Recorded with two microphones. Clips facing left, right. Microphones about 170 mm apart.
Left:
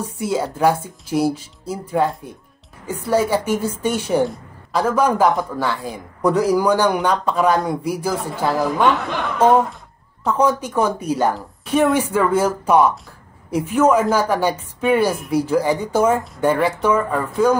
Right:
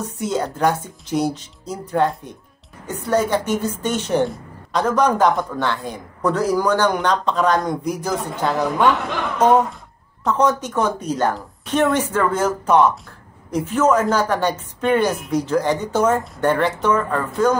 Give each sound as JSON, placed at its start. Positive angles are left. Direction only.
{"t": 0.0, "sound": "a man's voice", "side_deg": 5}
{"t": 10.2, "sound": "speech", "side_deg": 10}